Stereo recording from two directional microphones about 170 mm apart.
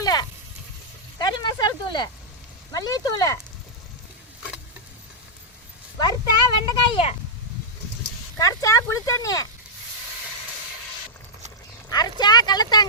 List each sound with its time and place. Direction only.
0.0 s frying: 25° left (ahead or behind)
1.2 s a sound: 25° left (ahead or behind)
2.7 s speech: 20° left (ahead or behind)
6.0 s speech: 25° left (ahead or behind)
8.4 s speech: 20° left (ahead or behind)
11.9 s a sound: 25° left (ahead or behind)
12.2 s speech: 25° left (ahead or behind)